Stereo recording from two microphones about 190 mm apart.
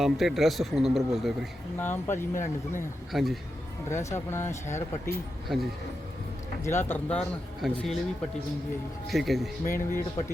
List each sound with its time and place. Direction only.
0.0 s speech: centre (ahead or behind)
1.8 s speech: 10° left (ahead or behind)
3.1 s speech: centre (ahead or behind)
3.8 s speech: 15° left (ahead or behind)
6.7 s speech: 10° left (ahead or behind)
9.0 s speech: centre (ahead or behind)
9.6 s speech: 45° left (ahead or behind)